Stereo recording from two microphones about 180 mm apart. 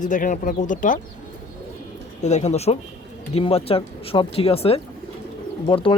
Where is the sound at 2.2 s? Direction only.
40° left (ahead or behind).